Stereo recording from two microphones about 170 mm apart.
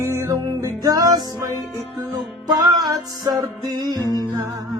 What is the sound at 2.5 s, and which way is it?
Music, 20° right (ahead or behind).